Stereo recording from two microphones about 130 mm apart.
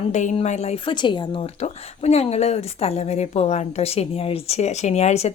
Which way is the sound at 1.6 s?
55° left (ahead or behind).